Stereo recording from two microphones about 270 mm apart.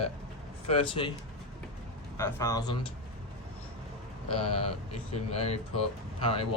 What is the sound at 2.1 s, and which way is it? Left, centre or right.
Speech, centre.